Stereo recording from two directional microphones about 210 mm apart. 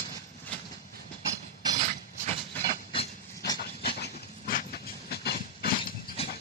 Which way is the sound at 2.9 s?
20° left (ahead or behind).